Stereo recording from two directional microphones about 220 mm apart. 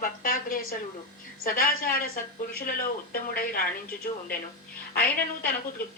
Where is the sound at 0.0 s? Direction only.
40° left (ahead or behind).